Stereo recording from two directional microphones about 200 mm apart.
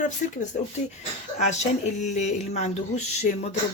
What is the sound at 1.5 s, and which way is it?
Speech, 35° left (ahead or behind).